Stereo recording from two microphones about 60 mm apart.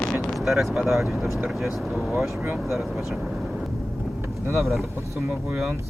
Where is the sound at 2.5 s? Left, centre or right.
Centre.